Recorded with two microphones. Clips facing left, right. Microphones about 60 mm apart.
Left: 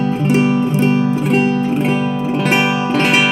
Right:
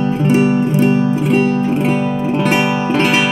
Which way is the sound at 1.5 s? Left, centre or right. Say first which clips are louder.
Right 1 dB; right.